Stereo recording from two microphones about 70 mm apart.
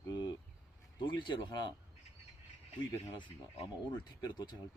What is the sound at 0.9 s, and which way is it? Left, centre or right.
Speech, left.